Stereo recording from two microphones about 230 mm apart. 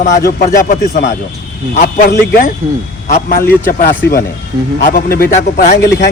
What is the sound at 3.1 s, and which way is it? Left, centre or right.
Speech, left.